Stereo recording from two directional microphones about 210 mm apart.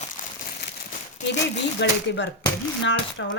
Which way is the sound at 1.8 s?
55° left (ahead or behind).